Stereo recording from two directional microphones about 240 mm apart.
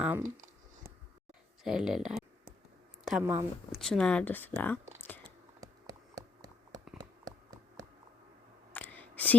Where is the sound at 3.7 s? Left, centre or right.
Centre.